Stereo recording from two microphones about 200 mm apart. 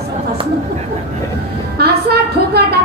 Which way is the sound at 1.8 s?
55° right (ahead or behind).